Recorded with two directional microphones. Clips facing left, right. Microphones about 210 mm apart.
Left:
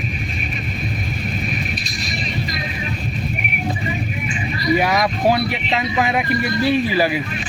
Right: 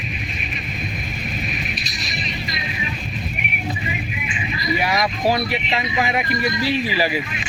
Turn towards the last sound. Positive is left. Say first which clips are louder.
# left 4 dB
turn(degrees=50)  # may be behind; listen again after turning